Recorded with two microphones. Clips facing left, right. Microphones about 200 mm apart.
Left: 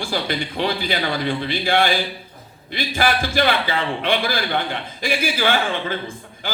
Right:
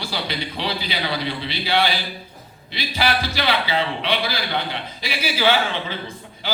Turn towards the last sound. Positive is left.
turn(degrees=50)  # may be behind; listen again after turning